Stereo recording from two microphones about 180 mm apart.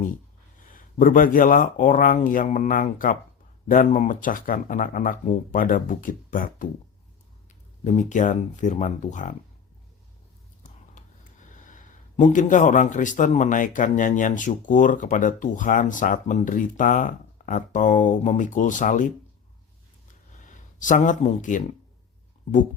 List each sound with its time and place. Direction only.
0.6 s a man's voice: 50° left (ahead or behind)
7.9 s a man's voice: 45° left (ahead or behind)
11.4 s a man's voice: 45° left (ahead or behind)
20.4 s speech: 45° left (ahead or behind)